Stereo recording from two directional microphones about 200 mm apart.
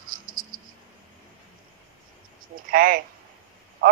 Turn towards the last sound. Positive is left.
turn(degrees=-50)  # may be behind; listen again after turning